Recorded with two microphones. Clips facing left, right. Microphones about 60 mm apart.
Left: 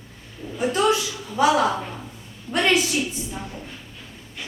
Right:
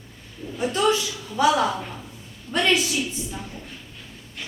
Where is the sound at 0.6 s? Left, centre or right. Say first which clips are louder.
Left 1 dB; centre.